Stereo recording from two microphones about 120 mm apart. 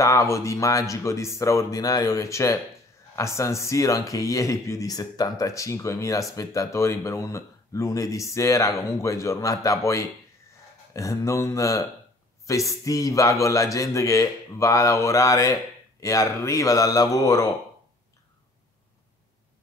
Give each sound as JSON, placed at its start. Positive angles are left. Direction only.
{"t": 0.0, "sound": "speech", "side_deg": 25}